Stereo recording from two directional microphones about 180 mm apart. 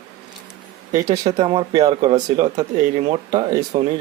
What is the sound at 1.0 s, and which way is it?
Speech, 20° right (ahead or behind).